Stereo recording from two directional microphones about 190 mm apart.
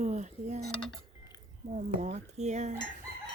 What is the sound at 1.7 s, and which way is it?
Speech, 35° right (ahead or behind).